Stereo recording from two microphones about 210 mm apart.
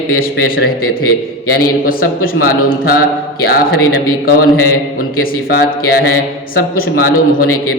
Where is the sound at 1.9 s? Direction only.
45° left (ahead or behind).